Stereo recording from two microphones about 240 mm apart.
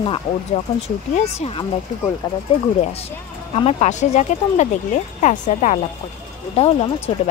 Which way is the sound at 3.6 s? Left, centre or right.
Left.